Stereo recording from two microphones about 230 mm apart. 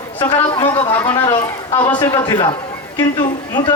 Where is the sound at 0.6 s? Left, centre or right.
Left.